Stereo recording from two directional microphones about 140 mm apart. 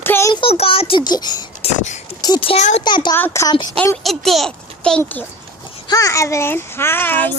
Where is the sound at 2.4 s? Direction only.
40° left (ahead or behind).